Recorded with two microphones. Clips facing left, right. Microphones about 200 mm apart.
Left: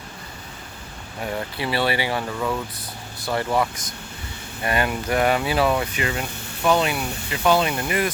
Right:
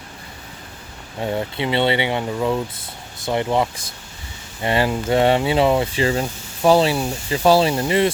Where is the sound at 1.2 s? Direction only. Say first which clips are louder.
Right 5 dB; 25° right (ahead or behind).